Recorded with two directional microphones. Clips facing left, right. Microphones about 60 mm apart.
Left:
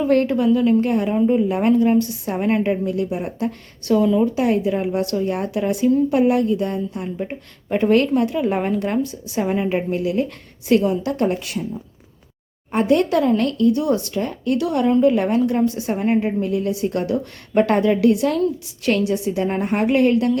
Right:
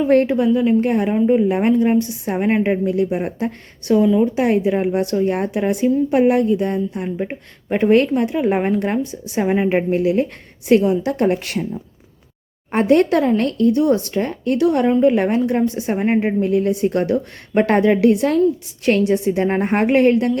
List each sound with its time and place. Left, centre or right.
0.1 s a woman's voice: right
0.8 s a woman's voice: right; by 4.3 s centre
4.4 s a woman's voice: right
11.3 s speech: right
12.7 s a woman's voice: right